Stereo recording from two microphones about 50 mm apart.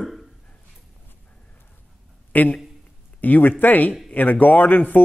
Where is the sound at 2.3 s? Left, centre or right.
Left.